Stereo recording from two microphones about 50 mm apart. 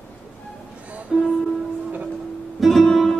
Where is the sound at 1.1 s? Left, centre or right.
Centre.